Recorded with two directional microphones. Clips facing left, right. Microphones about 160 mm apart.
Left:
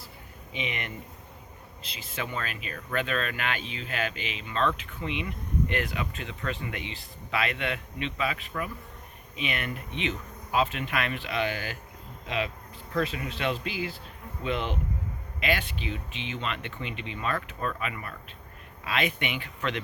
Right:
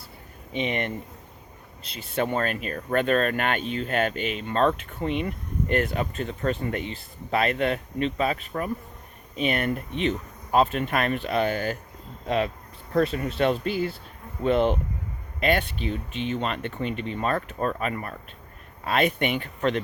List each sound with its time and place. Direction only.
0.5 s speech: 40° right (ahead or behind)
1.8 s speech: centre (ahead or behind)
2.1 s speech: 45° right (ahead or behind)